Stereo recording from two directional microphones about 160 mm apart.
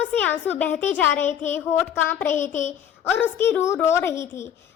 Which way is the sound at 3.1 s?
15° left (ahead or behind).